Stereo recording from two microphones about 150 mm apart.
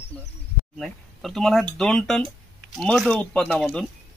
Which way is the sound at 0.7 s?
Centre (ahead or behind).